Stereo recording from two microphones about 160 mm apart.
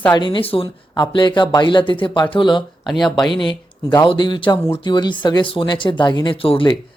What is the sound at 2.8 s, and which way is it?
Speech, centre (ahead or behind).